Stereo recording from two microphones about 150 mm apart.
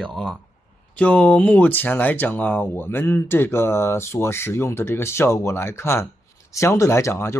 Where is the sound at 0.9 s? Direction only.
10° left (ahead or behind).